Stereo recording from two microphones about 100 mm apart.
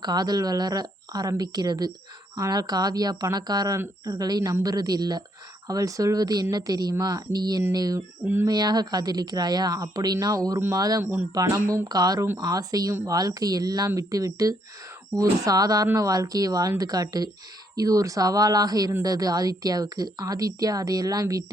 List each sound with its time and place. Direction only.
0.0 s a woman's voice: 45° right (ahead or behind)